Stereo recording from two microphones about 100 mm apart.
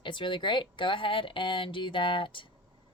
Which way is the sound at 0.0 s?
55° left (ahead or behind).